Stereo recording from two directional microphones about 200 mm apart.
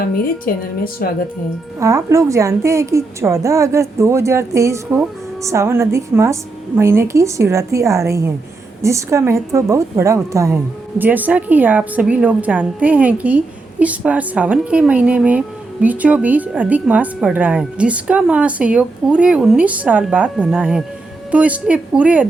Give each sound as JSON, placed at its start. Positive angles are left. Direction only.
{"t": 0.5, "sound": "a woman's voice", "side_deg": 45}
{"t": 1.8, "sound": "speech", "side_deg": -15}